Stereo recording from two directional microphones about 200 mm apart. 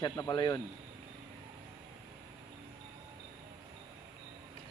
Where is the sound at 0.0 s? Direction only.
20° left (ahead or behind).